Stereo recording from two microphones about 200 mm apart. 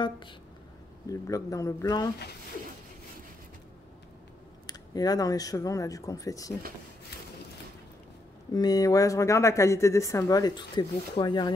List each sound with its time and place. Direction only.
1.0 s speech: 15° left (ahead or behind)
4.6 s speech: 20° left (ahead or behind)
8.5 s speech: 20° left (ahead or behind)